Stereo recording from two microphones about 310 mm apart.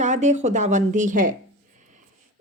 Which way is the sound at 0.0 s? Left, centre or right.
Right.